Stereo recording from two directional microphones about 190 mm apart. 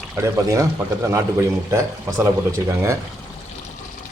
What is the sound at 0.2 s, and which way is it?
A man's voice, 15° right (ahead or behind).